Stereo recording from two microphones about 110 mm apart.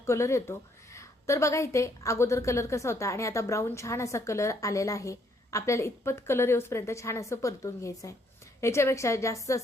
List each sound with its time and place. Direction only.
0.0 s a woman's voice: 25° left (ahead or behind)